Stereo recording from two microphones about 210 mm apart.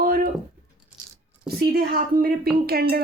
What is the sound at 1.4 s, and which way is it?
A woman's voice, 50° right (ahead or behind).